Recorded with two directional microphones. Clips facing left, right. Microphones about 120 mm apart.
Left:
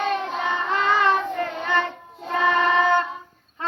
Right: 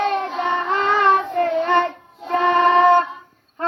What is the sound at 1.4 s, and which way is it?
Child singing, 50° right (ahead or behind).